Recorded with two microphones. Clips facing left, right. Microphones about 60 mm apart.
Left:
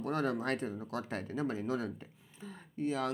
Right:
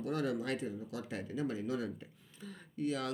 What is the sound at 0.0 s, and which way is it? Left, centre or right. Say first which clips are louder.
Speech: left 2 dB; left.